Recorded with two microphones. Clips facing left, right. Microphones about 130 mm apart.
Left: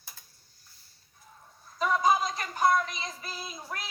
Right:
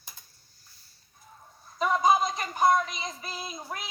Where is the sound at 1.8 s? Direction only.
15° right (ahead or behind).